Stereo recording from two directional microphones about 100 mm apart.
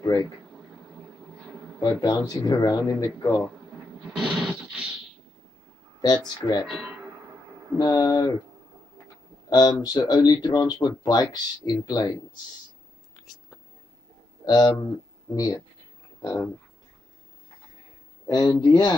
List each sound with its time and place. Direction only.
0.0 s speech: 40° left (ahead or behind)
1.8 s speech: 40° left (ahead or behind)
4.3 s a sound: 10° right (ahead or behind)
5.9 s speech: 40° left (ahead or behind)
6.7 s speech: centre (ahead or behind)
7.7 s speech: 45° left (ahead or behind)
9.5 s speech: 40° left (ahead or behind)
14.4 s a man's voice: 45° left (ahead or behind)
18.2 s speech: 45° left (ahead or behind)